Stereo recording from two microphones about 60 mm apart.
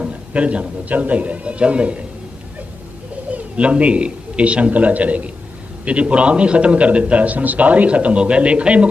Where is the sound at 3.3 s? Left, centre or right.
Right.